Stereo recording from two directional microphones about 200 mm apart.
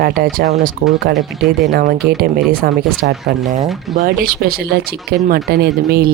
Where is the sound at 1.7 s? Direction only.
45° right (ahead or behind).